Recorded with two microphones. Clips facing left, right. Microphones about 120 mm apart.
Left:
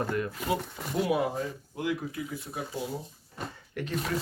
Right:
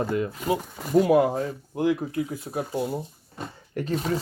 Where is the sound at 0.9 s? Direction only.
40° right (ahead or behind).